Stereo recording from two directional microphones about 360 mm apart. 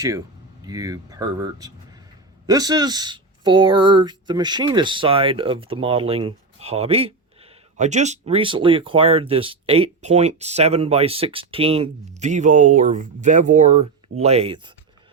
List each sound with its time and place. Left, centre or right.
0.7 s speech: centre